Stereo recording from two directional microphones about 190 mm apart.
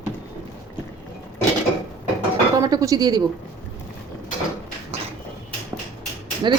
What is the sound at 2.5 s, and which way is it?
Speech, 15° right (ahead or behind).